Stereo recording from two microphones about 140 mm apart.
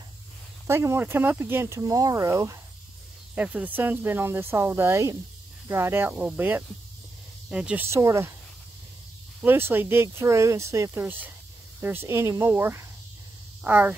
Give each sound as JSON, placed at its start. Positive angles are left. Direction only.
{"t": 0.7, "sound": "speech", "side_deg": -20}
{"t": 3.3, "sound": "speech", "side_deg": -10}
{"t": 7.9, "sound": "speech", "side_deg": -20}
{"t": 9.4, "sound": "speech", "side_deg": -15}